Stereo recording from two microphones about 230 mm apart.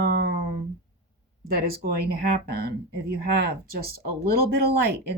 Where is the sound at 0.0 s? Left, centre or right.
Right.